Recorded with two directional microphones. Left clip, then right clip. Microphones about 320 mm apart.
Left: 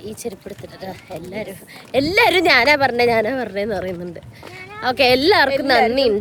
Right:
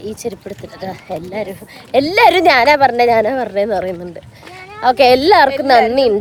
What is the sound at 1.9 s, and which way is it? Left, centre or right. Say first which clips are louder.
A woman's voice: right 5 dB; centre.